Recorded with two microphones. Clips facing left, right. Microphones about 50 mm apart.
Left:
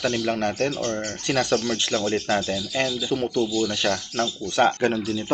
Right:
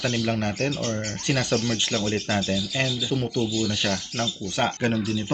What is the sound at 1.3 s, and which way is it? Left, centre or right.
Speech, centre.